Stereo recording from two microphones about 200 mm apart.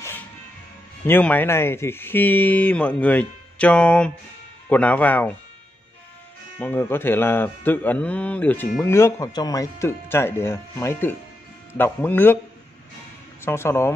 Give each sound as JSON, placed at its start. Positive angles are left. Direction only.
{"t": 1.0, "sound": "speech", "side_deg": 10}
{"t": 6.6, "sound": "speech", "side_deg": 10}
{"t": 13.4, "sound": "speech", "side_deg": 10}